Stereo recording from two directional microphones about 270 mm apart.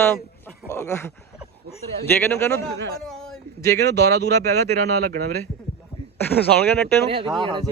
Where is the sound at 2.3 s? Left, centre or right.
Centre.